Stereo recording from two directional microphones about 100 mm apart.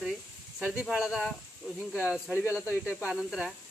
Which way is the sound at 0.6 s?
10° right (ahead or behind).